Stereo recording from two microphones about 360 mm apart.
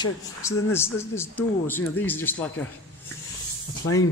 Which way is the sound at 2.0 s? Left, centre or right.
Centre.